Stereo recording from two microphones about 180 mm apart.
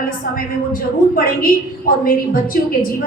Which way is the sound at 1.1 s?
50° left (ahead or behind).